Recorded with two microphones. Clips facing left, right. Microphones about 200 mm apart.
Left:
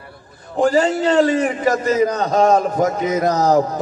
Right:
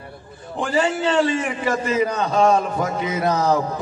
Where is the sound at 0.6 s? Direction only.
40° left (ahead or behind).